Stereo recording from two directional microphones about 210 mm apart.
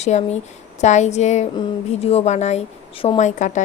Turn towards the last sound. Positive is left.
turn(degrees=35)  # may be behind; listen again after turning